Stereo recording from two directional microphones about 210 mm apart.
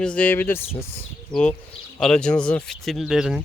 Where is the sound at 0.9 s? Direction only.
5° left (ahead or behind).